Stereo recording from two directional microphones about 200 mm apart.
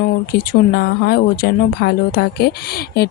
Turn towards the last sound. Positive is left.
turn(degrees=50)  # may be behind; listen again after turning